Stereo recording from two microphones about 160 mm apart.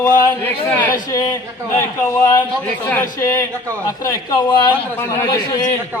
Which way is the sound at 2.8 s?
15° left (ahead or behind).